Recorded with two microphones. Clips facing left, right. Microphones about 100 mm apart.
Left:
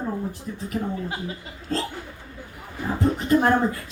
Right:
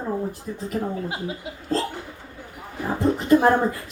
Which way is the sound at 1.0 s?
15° right (ahead or behind).